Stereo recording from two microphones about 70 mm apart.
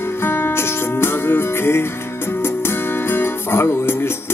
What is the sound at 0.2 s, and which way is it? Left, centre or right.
Music, left.